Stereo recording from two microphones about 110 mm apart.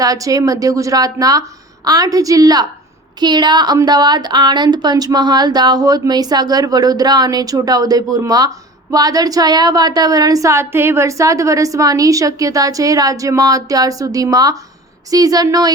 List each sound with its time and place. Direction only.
0.0 s a woman's voice: 30° right (ahead or behind)